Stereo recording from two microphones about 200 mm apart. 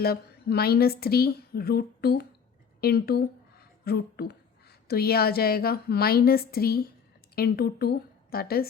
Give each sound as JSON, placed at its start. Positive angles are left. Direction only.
{"t": 0.0, "sound": "a woman's voice", "side_deg": 50}